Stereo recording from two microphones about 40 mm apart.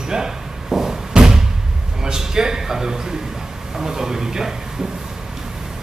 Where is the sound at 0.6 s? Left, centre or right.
Centre.